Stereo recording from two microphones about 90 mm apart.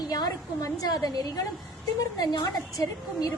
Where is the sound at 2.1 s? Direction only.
50° left (ahead or behind).